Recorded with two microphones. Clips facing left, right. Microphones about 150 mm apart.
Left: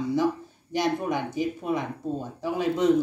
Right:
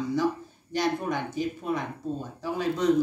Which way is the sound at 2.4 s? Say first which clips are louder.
Left 3 dB; 20° left (ahead or behind).